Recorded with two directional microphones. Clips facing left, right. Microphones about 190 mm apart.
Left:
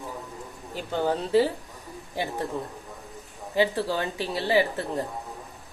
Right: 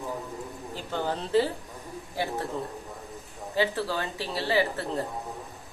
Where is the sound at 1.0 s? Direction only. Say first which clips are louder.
Left 3 dB; 10° left (ahead or behind).